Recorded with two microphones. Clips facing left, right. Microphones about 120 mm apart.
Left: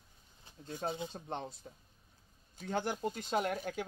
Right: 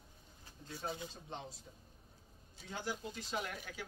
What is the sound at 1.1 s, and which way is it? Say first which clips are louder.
Speech: left 6 dB; 60° left (ahead or behind).